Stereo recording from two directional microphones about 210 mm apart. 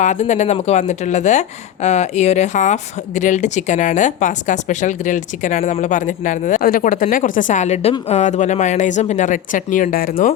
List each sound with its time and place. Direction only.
0.0 s a woman's voice: 35° left (ahead or behind)